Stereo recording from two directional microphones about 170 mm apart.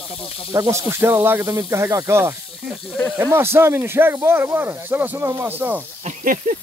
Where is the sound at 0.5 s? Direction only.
15° right (ahead or behind).